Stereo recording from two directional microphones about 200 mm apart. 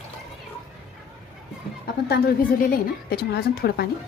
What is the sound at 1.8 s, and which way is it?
Speech, 50° left (ahead or behind).